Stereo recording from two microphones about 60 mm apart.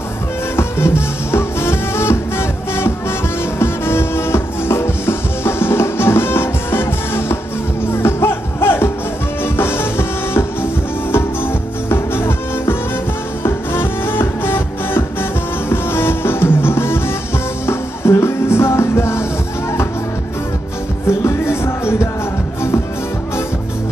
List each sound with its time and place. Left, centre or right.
0.6 s music: left
21.1 s music: left